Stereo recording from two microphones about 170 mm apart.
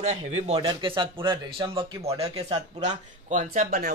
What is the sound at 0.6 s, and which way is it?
Speech, 25° right (ahead or behind).